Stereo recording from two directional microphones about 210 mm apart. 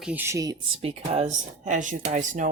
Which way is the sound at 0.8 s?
30° right (ahead or behind).